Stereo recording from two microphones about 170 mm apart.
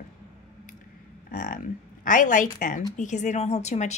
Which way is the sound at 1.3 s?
50° left (ahead or behind).